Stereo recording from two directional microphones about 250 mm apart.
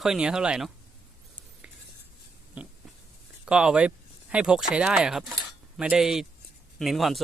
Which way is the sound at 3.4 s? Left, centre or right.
Centre.